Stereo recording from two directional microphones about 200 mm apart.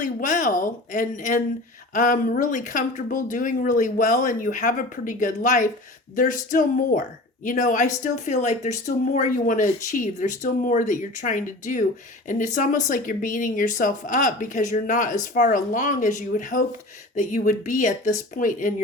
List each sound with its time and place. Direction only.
0.0 s speech: 40° left (ahead or behind)
6.1 s a sound: 40° left (ahead or behind)
7.4 s speech: 40° left (ahead or behind)